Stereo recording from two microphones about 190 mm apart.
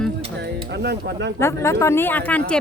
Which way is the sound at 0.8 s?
60° right (ahead or behind).